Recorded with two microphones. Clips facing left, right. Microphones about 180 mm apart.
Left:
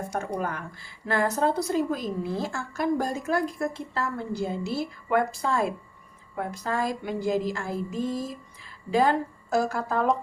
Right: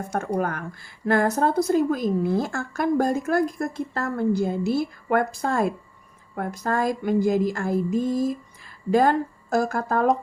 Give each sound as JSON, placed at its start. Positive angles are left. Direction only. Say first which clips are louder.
{"t": 0.1, "sound": "a woman's voice", "louder": "right 7 dB", "side_deg": -50}